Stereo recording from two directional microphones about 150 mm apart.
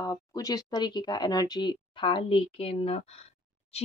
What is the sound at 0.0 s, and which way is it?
Speech, 25° left (ahead or behind).